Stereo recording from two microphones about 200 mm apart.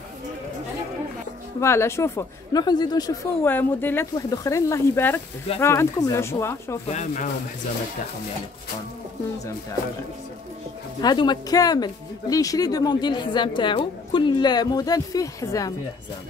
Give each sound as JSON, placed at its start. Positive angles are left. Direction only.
{"t": 1.6, "sound": "speech", "side_deg": 15}
{"t": 6.9, "sound": "speech", "side_deg": 35}
{"t": 11.0, "sound": "speech", "side_deg": 20}